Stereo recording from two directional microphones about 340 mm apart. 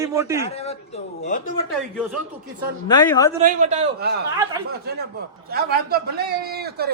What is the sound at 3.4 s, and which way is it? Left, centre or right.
A man's voice, centre.